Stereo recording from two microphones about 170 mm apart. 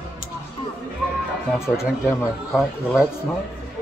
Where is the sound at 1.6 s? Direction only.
5° right (ahead or behind).